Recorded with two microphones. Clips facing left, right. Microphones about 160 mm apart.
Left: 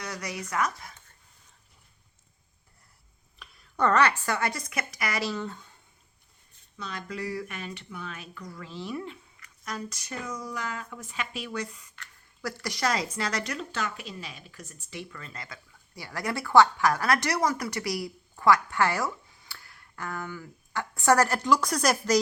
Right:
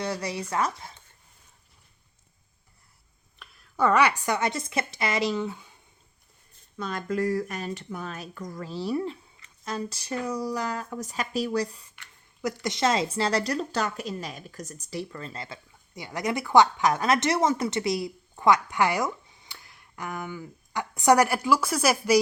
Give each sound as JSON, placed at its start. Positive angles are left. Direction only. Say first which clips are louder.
{"t": 0.0, "sound": "speech", "louder": "right 6 dB", "side_deg": -30}
{"t": 3.3, "sound": "speech", "louder": "right 2 dB", "side_deg": 0}
{"t": 6.7, "sound": "speech", "louder": "right 8 dB", "side_deg": -50}
{"t": 11.9, "sound": "speech", "louder": "right 2 dB", "side_deg": -20}